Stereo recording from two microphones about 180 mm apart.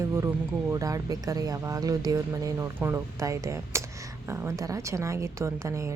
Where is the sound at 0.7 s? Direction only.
20° right (ahead or behind).